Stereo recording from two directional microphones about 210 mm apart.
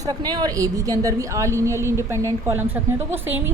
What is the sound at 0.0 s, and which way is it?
A woman's voice, 20° right (ahead or behind).